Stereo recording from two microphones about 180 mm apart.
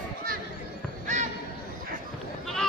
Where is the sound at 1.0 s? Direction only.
40° right (ahead or behind).